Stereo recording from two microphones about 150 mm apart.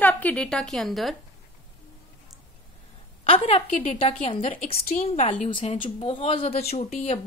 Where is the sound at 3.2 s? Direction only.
40° left (ahead or behind).